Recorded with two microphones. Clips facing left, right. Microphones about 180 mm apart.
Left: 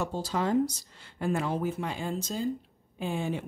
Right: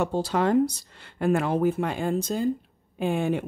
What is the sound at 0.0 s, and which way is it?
Speech, 65° right (ahead or behind).